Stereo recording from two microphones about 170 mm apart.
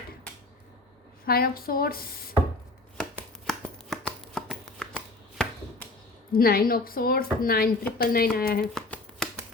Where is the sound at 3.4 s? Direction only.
5° left (ahead or behind).